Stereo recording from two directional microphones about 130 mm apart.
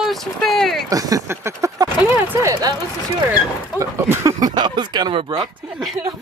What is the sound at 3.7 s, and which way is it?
Speech, 25° right (ahead or behind).